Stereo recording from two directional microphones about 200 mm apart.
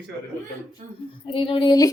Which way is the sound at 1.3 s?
25° left (ahead or behind).